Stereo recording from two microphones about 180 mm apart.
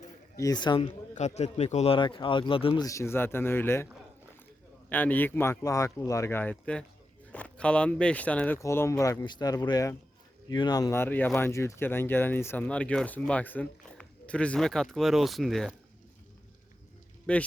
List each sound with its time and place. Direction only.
0.3 s speech: 20° left (ahead or behind)
1.1 s a man's voice: 40° left (ahead or behind)
2.8 s speech: 15° left (ahead or behind)
4.9 s speech: 10° left (ahead or behind)
17.3 s speech: 5° left (ahead or behind)